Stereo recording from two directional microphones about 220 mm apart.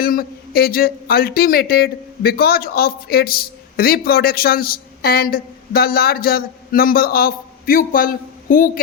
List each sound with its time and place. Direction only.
0.0 s a man's voice: 40° left (ahead or behind)